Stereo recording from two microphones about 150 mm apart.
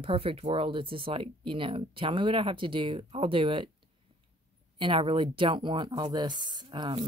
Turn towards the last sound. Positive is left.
turn(degrees=-30)  # may be behind; listen again after turning